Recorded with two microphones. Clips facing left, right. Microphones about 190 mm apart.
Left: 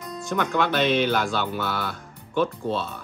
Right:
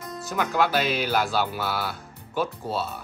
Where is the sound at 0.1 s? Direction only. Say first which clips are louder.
Left 2 dB; 5° right (ahead or behind).